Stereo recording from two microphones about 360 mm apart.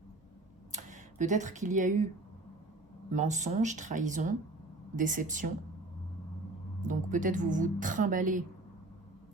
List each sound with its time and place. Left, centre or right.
0.7 s speech: centre
3.1 s speech: centre
6.8 s speech: right